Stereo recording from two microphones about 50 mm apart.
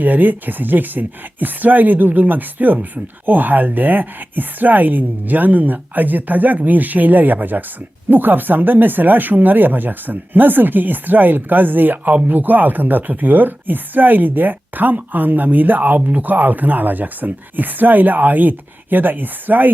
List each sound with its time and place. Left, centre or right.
0.0 s speech: right